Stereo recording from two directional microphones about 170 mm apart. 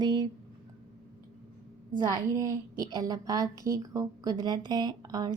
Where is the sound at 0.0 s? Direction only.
25° right (ahead or behind).